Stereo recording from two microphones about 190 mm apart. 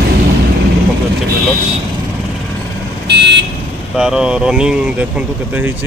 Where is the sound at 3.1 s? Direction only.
65° right (ahead or behind).